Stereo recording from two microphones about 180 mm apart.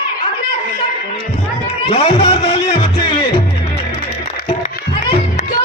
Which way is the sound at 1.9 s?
30° left (ahead or behind).